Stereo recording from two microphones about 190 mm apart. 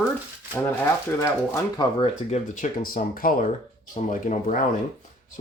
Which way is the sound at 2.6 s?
45° left (ahead or behind).